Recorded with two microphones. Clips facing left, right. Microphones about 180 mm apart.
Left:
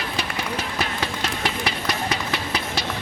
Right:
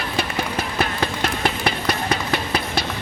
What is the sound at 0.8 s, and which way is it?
Run, 55° right (ahead or behind).